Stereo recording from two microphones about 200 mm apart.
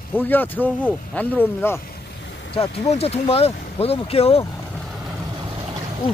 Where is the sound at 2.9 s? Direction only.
30° left (ahead or behind).